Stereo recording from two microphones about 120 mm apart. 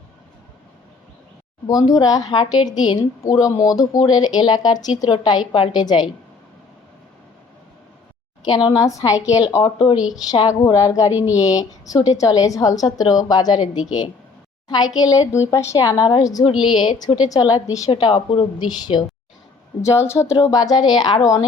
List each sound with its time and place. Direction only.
1.9 s a woman's voice: 30° left (ahead or behind)
8.4 s a woman's voice: 35° left (ahead or behind)
9.6 s a woman's voice: 45° left (ahead or behind)
10.4 s a woman's voice: 25° left (ahead or behind)
11.1 s speech: 15° right (ahead or behind)
11.3 s a woman's voice: 30° left (ahead or behind)
17.9 s a woman's voice: 45° left (ahead or behind)
19.8 s a woman's voice: 25° left (ahead or behind)